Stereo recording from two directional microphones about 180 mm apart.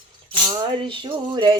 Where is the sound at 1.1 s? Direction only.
25° right (ahead or behind).